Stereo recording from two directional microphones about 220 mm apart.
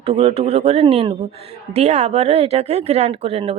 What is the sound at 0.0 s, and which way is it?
Speech, 25° right (ahead or behind).